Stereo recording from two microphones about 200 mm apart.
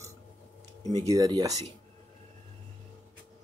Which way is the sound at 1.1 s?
20° right (ahead or behind).